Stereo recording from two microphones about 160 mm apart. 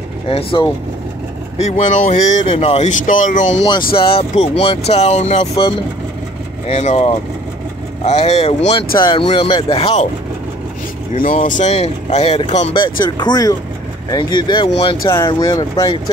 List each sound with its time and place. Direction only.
0.3 s speech: 35° left (ahead or behind)
1.6 s speech: 50° left (ahead or behind)
2.4 s speech: 35° left (ahead or behind); by 3.6 s 50° left (ahead or behind)
3.6 s speech: 30° left (ahead or behind)
6.7 s speech: 45° left (ahead or behind)
11.3 s speech: 50° left (ahead or behind)
13.0 s speech: 25° left (ahead or behind)